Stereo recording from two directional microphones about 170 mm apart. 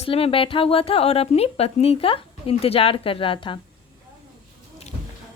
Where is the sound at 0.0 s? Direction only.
35° left (ahead or behind).